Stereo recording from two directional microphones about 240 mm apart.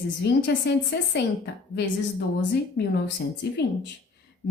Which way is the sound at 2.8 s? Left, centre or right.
Left.